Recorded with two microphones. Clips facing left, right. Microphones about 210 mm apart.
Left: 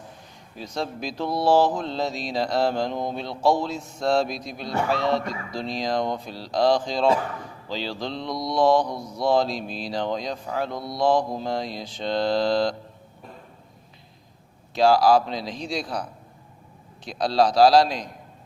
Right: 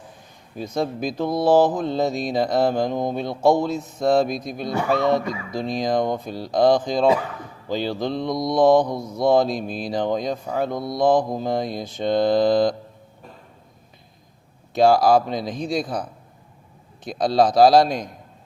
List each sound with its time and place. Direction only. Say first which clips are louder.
0.5 s speech: right 5 dB; 50° right (ahead or behind)
14.8 s speech: right 2 dB; 50° right (ahead or behind)